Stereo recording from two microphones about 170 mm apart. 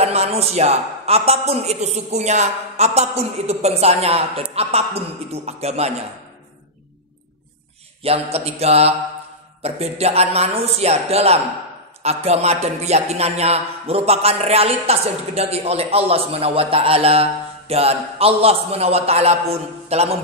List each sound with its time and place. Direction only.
0.0 s speech: 40° right (ahead or behind)
8.0 s speech: 35° right (ahead or behind)